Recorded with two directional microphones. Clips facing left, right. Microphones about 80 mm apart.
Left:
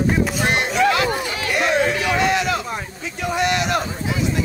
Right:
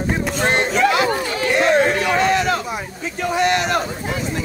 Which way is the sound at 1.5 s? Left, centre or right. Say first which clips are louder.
Right 3 dB; right.